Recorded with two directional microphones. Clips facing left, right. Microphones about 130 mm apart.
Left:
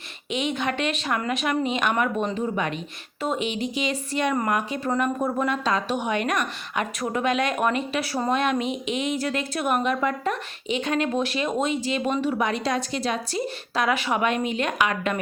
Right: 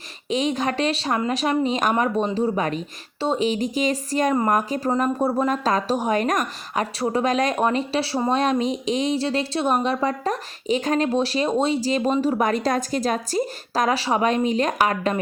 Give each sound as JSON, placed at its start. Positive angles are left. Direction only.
{"t": 0.3, "sound": "speech", "side_deg": -35}